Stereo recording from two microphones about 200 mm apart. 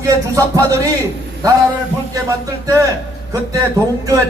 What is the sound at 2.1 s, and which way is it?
Music, 15° right (ahead or behind).